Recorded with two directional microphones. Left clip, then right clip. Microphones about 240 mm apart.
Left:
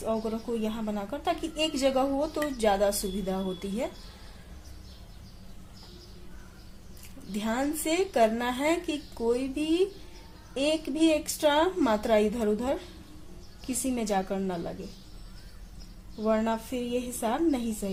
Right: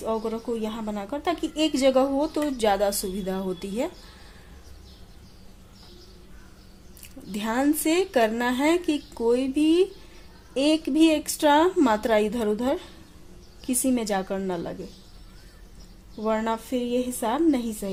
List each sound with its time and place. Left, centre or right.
0.0 s a woman's voice: right
7.3 s a woman's voice: right
16.2 s a woman's voice: right